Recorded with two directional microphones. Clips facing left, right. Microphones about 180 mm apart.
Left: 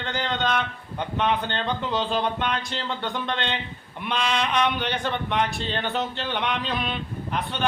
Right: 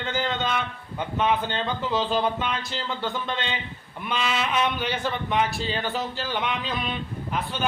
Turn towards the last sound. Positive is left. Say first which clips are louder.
# even
turn(degrees=0)  # may be behind; listen again after turning